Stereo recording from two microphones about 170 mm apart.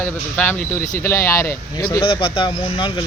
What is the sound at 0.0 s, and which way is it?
Speech, 10° left (ahead or behind).